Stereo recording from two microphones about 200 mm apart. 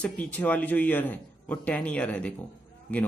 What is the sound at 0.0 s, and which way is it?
Speech, 5° left (ahead or behind).